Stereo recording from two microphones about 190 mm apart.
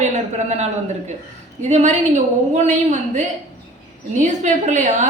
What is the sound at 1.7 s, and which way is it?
A woman's voice, 40° right (ahead or behind).